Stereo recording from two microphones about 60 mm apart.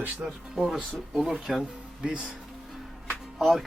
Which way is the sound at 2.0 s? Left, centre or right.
Centre.